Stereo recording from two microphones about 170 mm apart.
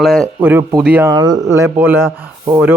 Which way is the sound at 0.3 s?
10° right (ahead or behind).